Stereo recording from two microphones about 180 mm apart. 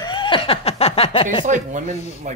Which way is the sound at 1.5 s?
45° right (ahead or behind).